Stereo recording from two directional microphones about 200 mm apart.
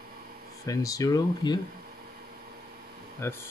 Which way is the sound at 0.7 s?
15° left (ahead or behind).